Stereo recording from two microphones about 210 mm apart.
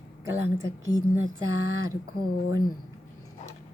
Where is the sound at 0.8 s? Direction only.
20° left (ahead or behind).